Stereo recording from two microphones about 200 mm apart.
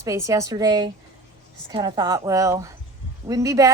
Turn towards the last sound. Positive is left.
turn(degrees=-15)  # may be behind; listen again after turning